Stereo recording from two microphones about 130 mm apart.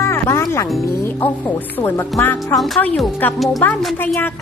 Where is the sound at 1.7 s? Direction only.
15° left (ahead or behind).